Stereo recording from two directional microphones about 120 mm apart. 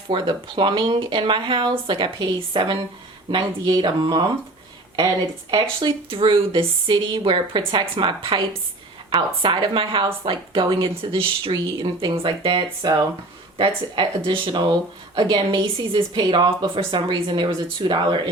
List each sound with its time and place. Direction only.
0.1 s a woman's voice: 45° right (ahead or behind)
16.1 s speech: 35° right (ahead or behind)